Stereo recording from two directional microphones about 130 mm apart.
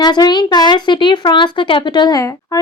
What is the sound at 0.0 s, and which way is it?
A woman's voice, 35° left (ahead or behind).